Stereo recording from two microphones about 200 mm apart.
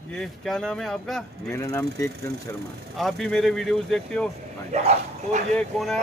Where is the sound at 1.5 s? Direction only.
15° left (ahead or behind).